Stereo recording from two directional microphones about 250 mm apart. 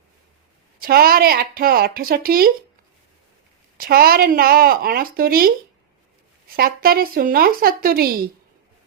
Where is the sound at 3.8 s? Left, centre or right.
Right.